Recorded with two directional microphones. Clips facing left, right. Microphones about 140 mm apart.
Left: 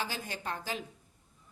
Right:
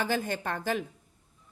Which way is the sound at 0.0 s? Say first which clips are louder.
Right 8 dB; 50° right (ahead or behind).